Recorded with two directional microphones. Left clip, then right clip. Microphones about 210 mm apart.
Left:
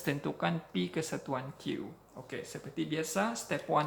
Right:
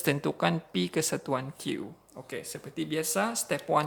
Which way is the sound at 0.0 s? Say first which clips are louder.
Right 6 dB; 55° right (ahead or behind).